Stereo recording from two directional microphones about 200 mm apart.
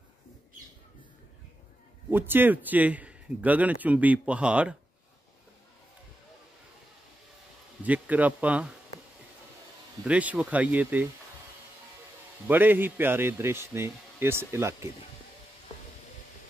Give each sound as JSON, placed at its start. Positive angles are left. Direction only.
{"t": 2.0, "sound": "a man's voice", "side_deg": -10}
{"t": 7.8, "sound": "a man's voice", "side_deg": -10}
{"t": 10.0, "sound": "a man's voice", "side_deg": -5}
{"t": 12.4, "sound": "a man's voice", "side_deg": -10}